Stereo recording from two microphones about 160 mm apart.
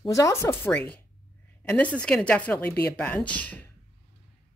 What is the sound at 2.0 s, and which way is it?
A woman's voice, 5° left (ahead or behind).